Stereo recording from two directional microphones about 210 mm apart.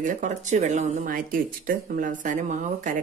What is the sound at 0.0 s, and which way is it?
Speech, 40° right (ahead or behind).